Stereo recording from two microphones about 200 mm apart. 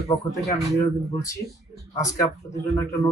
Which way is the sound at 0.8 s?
15° left (ahead or behind).